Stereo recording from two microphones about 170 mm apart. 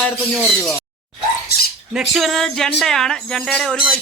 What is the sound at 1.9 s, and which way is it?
Speech, 5° right (ahead or behind).